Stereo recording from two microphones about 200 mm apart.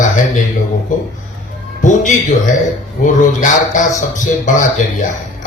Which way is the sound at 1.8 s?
40° left (ahead or behind).